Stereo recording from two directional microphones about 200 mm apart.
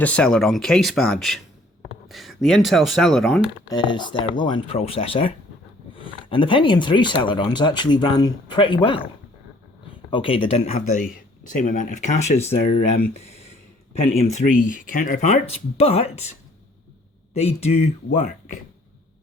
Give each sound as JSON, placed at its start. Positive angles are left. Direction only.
{"t": 0.0, "sound": "speech", "side_deg": 5}
{"t": 3.7, "sound": "speech", "side_deg": 20}
{"t": 10.1, "sound": "speech", "side_deg": 25}
{"t": 14.3, "sound": "speech", "side_deg": 40}
{"t": 17.3, "sound": "speech", "side_deg": 30}